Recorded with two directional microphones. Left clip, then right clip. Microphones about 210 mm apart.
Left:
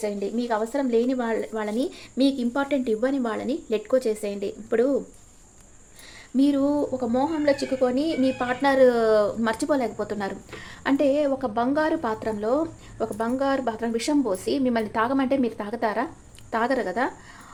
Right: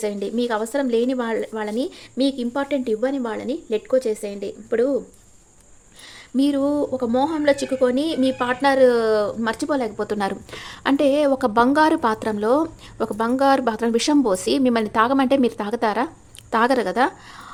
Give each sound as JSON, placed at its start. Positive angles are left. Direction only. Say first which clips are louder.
{"t": 0.0, "sound": "speech", "louder": "right 4 dB", "side_deg": -20}
{"t": 6.3, "sound": "a woman's voice", "louder": "right 2 dB", "side_deg": -15}